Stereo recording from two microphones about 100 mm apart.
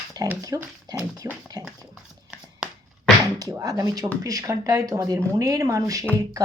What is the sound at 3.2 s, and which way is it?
Speech, 35° right (ahead or behind).